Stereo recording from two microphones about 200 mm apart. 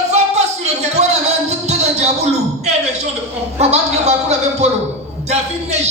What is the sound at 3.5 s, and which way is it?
Music, 30° right (ahead or behind).